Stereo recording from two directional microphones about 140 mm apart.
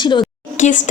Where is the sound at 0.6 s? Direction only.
65° left (ahead or behind).